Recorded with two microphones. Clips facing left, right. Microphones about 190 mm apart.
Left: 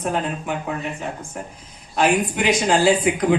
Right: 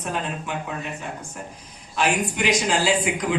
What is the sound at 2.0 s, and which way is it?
A man's voice, 55° left (ahead or behind).